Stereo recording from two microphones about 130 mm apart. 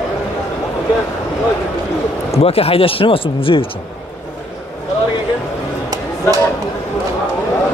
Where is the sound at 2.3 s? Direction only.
50° left (ahead or behind).